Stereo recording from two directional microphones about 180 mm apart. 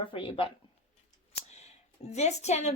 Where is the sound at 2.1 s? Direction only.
40° left (ahead or behind).